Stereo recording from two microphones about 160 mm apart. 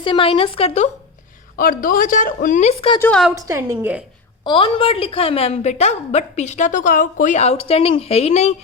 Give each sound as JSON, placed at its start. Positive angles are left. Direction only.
{"t": 0.0, "sound": "a woman's voice", "side_deg": 30}
{"t": 1.5, "sound": "speech", "side_deg": 60}
{"t": 3.0, "sound": "a woman's voice", "side_deg": 5}
{"t": 3.3, "sound": "a woman's voice", "side_deg": -20}
{"t": 3.8, "sound": "a woman's voice", "side_deg": -10}
{"t": 4.4, "sound": "a woman's voice", "side_deg": 30}